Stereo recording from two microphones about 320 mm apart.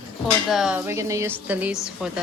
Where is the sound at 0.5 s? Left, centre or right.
Centre.